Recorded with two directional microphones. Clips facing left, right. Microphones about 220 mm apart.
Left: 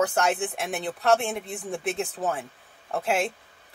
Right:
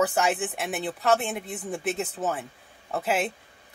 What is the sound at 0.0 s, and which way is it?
Speech, 5° right (ahead or behind).